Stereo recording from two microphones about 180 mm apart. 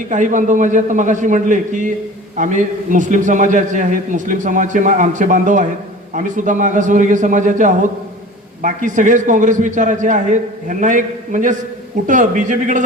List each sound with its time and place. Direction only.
0.1 s a man's voice: 45° right (ahead or behind)